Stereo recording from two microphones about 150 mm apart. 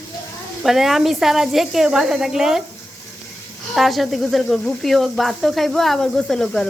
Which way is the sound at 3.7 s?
Centre (ahead or behind).